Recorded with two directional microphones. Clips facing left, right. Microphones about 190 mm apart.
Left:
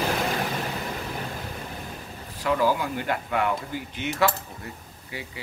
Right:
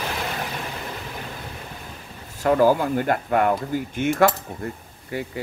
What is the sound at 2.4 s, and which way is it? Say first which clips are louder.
Speech: right 6 dB; 45° right (ahead or behind).